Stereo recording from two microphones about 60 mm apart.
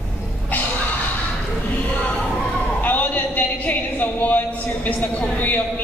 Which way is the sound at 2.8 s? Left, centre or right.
Left.